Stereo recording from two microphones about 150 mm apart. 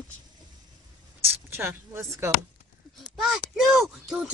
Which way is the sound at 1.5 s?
15° right (ahead or behind).